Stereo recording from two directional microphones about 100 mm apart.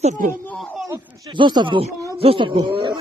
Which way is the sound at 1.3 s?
50° right (ahead or behind).